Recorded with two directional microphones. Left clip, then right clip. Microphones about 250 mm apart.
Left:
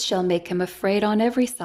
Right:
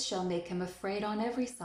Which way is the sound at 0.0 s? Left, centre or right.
Left.